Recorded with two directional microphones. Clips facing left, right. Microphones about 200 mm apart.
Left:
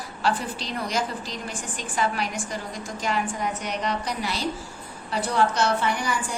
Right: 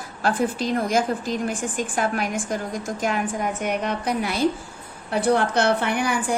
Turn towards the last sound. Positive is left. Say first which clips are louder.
# right 5 dB
turn(degrees=-60)  # may be behind; listen again after turning